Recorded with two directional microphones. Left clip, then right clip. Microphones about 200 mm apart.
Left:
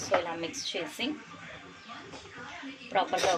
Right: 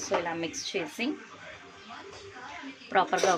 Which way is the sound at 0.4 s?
40° right (ahead or behind).